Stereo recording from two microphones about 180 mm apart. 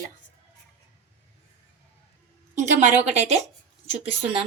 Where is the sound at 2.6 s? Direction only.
45° right (ahead or behind).